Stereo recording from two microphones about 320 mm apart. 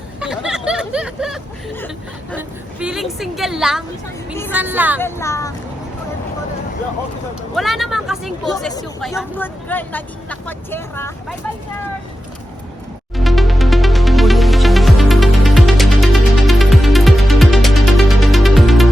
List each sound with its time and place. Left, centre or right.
0.2 s a sound: centre
2.8 s speech: centre
4.9 s speech: centre
7.5 s speech: centre
13.1 s music: centre